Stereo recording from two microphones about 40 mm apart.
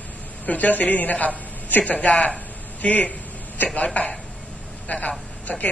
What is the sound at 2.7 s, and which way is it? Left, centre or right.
A man's voice, left.